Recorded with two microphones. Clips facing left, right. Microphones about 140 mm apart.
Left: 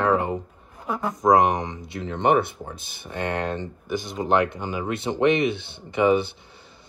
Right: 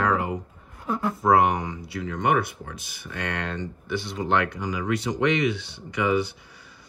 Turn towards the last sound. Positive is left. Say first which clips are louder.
# left 4 dB
turn(degrees=25)  # may be behind; listen again after turning